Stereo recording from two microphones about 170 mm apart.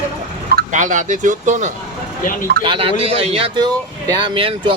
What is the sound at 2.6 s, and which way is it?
Speech, 30° right (ahead or behind).